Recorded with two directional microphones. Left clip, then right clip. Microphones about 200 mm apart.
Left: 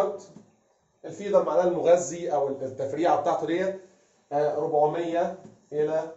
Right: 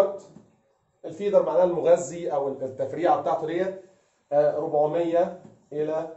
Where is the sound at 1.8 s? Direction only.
Centre (ahead or behind).